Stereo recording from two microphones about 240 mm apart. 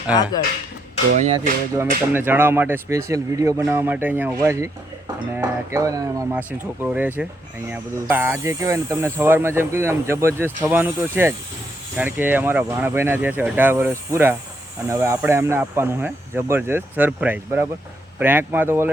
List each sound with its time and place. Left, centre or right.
1.2 s speech: right
2.1 s speech: centre